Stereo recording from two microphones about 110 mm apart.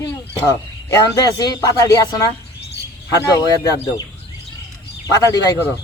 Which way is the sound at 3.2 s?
30° left (ahead or behind).